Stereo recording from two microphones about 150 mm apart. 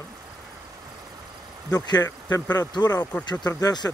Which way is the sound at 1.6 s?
25° left (ahead or behind).